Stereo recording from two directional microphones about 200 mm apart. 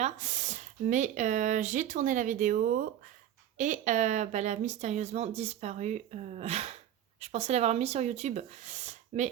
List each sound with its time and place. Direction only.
0.0 s speech: 35° right (ahead or behind)